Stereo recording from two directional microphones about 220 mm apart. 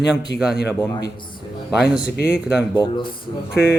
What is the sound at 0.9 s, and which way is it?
Speech, 20° left (ahead or behind).